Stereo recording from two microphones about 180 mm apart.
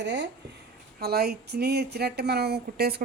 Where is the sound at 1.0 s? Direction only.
60° right (ahead or behind).